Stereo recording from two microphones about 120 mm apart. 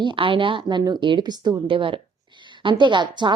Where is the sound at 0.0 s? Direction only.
45° right (ahead or behind).